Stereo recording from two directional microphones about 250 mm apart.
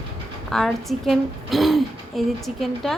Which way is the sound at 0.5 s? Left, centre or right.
Centre.